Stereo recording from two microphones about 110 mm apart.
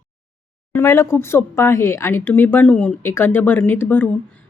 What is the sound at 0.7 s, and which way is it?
Speech, 25° left (ahead or behind).